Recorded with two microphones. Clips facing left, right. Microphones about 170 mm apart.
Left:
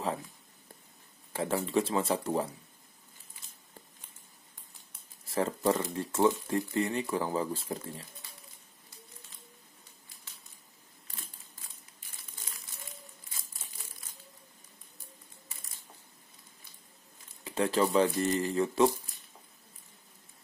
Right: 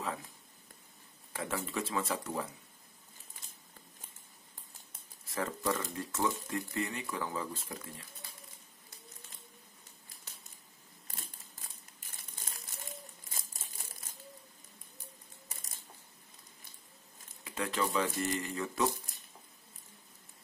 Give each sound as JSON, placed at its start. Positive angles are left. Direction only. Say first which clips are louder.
{"t": 1.3, "sound": "speech", "louder": "left 8 dB", "side_deg": 30}
{"t": 5.3, "sound": "speech", "louder": "left 6 dB", "side_deg": 30}
{"t": 12.4, "sound": "crumpling", "louder": "right 2 dB", "side_deg": -45}
{"t": 17.5, "sound": "speech", "louder": "left 7 dB", "side_deg": 30}